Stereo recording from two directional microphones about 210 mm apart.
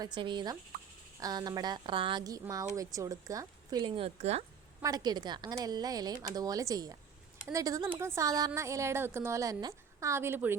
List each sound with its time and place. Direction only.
0.0 s a woman's voice: 20° right (ahead or behind)
4.8 s a woman's voice: 20° right (ahead or behind)